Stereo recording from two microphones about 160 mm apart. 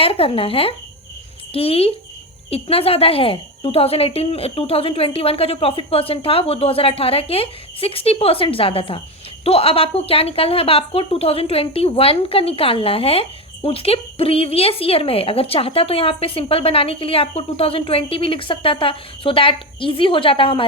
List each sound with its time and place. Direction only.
0.0 s a woman's voice: 35° left (ahead or behind)